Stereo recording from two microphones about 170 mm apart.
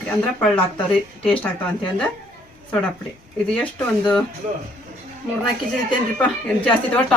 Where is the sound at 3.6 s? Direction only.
5° left (ahead or behind).